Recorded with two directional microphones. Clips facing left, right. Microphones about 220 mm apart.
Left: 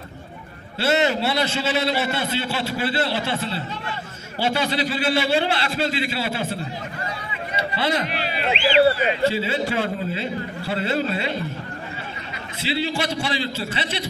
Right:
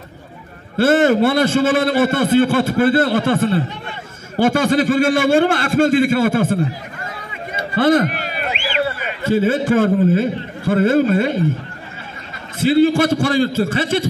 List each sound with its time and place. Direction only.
0.7 s a man's voice: 50° right (ahead or behind)
7.5 s a sound: 50° right (ahead or behind)
9.2 s a man's voice: 50° right (ahead or behind)
12.5 s a man's voice: 50° right (ahead or behind)